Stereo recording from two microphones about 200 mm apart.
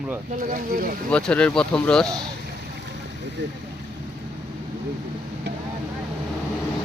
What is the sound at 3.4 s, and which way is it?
Speech, 60° right (ahead or behind).